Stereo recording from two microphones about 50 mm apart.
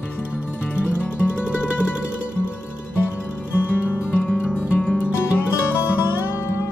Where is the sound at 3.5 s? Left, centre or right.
Left.